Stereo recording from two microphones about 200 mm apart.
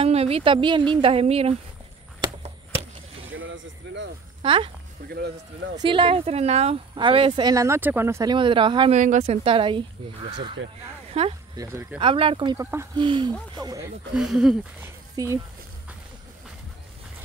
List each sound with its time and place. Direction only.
0.0 s a woman's voice: 30° right (ahead or behind)
2.2 s a sound: 30° right (ahead or behind)
3.3 s a sound: 70° right (ahead or behind)
4.4 s speech: 25° right (ahead or behind)
5.1 s speech: 55° right (ahead or behind)
5.8 s speech: 25° right (ahead or behind)
8.9 s speech: 35° right (ahead or behind)
11.6 s speech: 15° right (ahead or behind)
12.0 s speech: 25° right (ahead or behind)
14.1 s speech: 5° right (ahead or behind)
15.2 s speech: 20° right (ahead or behind)